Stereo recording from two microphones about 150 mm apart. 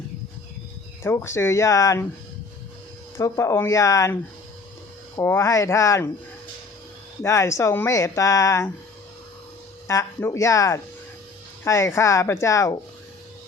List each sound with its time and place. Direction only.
1.0 s speech: 15° left (ahead or behind)
3.2 s speech: 20° left (ahead or behind)
7.2 s speech: 20° left (ahead or behind)
9.8 s speech: 20° left (ahead or behind)